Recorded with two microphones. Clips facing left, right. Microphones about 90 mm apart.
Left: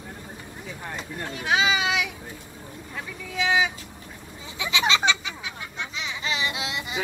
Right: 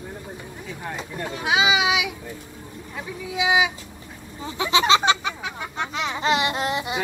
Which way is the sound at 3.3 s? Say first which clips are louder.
Right 2 dB; 10° right (ahead or behind).